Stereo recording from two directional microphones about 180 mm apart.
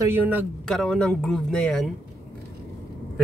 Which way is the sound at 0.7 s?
5° left (ahead or behind).